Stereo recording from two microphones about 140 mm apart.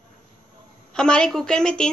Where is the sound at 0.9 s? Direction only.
5° left (ahead or behind).